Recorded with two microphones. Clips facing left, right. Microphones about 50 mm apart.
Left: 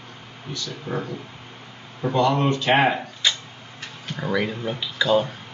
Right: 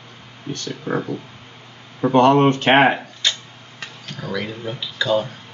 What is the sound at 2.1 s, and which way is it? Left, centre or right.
Speech, right.